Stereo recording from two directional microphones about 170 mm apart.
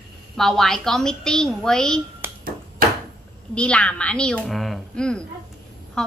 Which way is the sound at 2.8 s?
55° right (ahead or behind).